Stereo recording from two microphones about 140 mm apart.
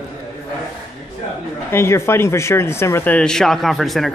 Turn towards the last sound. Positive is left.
turn(degrees=0)  # may be behind; listen again after turning